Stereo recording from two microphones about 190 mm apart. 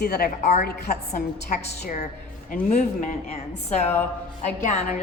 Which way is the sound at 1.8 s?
40° left (ahead or behind).